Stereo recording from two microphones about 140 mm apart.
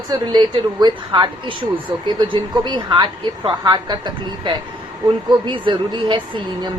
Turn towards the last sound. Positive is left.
turn(degrees=-35)  # may be behind; listen again after turning